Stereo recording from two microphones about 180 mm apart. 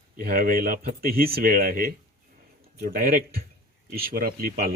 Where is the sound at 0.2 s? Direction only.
55° right (ahead or behind).